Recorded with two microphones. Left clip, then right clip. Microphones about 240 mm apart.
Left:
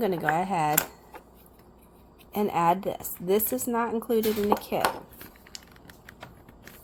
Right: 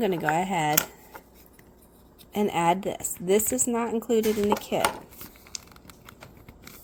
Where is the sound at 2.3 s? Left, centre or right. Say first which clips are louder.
Even; right.